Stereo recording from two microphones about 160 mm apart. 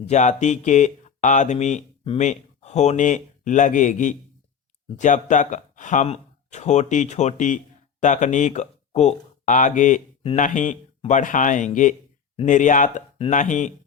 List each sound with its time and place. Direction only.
0.0 s speech: 45° left (ahead or behind)